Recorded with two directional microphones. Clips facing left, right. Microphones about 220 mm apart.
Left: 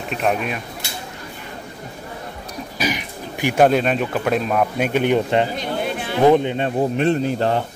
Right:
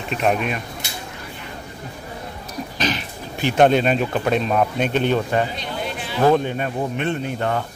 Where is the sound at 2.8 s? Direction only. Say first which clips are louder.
Left 1 dB; 15° left (ahead or behind); by 7.6 s 30° left (ahead or behind).